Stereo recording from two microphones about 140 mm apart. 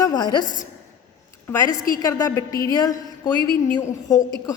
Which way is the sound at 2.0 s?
25° left (ahead or behind).